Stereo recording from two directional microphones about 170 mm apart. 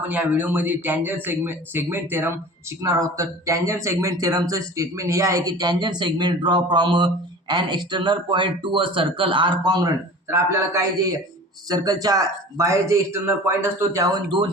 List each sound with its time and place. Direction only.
0.1 s speech: 10° right (ahead or behind); by 14.5 s 25° right (ahead or behind)